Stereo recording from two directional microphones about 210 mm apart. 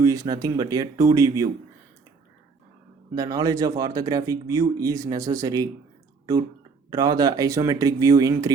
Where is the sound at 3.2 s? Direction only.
15° right (ahead or behind).